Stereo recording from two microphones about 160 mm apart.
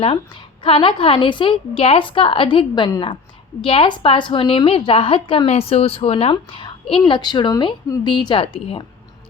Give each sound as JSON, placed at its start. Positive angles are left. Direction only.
{"t": 0.6, "sound": "a woman's voice", "side_deg": 35}